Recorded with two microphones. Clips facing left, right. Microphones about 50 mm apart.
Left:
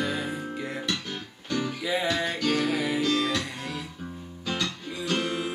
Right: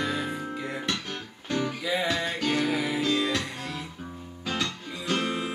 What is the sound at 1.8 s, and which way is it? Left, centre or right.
Music, centre.